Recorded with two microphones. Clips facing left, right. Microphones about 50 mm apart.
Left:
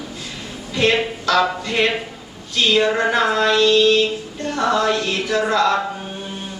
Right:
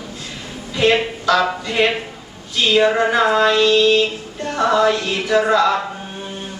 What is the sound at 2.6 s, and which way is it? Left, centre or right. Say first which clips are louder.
Music: right 2 dB; centre.